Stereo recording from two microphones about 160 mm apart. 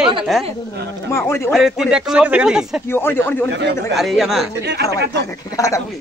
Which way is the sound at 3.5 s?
90° right.